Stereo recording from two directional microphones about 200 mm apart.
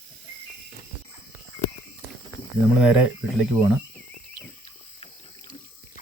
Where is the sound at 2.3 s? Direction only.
15° left (ahead or behind).